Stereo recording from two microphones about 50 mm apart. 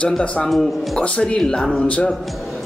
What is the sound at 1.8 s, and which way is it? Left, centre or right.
Speech, left.